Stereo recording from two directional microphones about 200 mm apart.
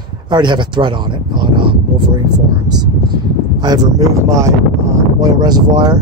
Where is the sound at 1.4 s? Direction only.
25° right (ahead or behind).